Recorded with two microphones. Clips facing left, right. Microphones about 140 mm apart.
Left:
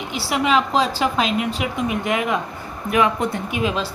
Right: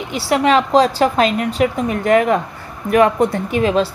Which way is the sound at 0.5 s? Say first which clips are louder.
Right 6 dB; 45° right (ahead or behind).